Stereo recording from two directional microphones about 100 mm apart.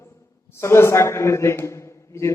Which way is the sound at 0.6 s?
25° left (ahead or behind).